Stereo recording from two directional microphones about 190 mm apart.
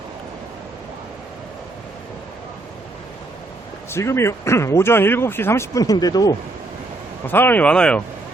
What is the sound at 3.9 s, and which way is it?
Speech, 15° left (ahead or behind).